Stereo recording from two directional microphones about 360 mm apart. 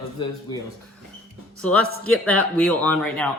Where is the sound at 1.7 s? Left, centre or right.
Right.